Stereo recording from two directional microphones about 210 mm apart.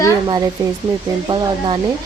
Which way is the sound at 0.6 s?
20° right (ahead or behind).